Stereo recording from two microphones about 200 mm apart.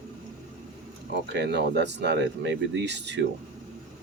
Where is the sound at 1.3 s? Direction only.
60° right (ahead or behind).